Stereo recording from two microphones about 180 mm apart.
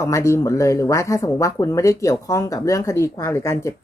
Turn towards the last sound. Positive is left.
turn(degrees=15)  # may be behind; listen again after turning